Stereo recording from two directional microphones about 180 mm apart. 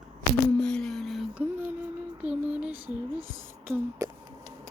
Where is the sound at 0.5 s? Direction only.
5° left (ahead or behind).